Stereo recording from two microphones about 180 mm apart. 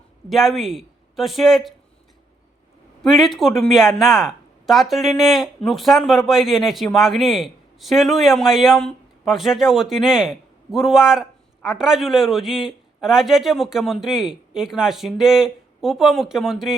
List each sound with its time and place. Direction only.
0.3 s speech: centre (ahead or behind)
3.0 s speech: centre (ahead or behind)